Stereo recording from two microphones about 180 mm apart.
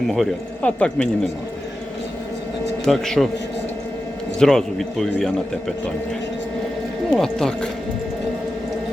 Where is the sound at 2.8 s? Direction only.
Centre (ahead or behind).